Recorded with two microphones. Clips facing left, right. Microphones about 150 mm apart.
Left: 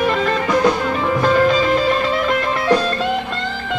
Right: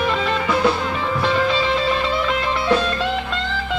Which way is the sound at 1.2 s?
45° left (ahead or behind).